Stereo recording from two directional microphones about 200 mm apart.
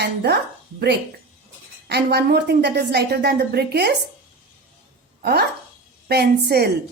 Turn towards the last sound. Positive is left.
turn(degrees=-50)  # may be behind; listen again after turning